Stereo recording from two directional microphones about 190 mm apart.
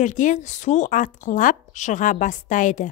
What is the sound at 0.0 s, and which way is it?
Speech, 40° left (ahead or behind).